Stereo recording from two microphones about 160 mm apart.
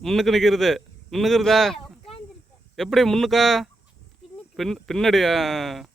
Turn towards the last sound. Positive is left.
turn(degrees=0)  # may be behind; listen again after turning